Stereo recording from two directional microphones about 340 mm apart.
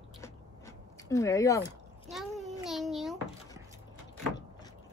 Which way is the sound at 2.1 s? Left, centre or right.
Centre.